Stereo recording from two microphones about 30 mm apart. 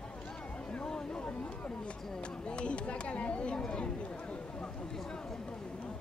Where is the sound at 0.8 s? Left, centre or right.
Left.